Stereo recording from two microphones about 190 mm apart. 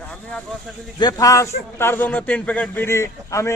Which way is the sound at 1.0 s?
20° left (ahead or behind).